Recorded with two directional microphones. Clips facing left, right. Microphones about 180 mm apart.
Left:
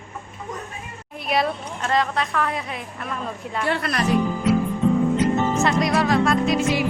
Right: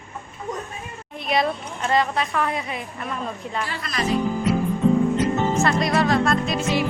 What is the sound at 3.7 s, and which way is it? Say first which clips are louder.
Speech: left 5 dB; 60° left (ahead or behind).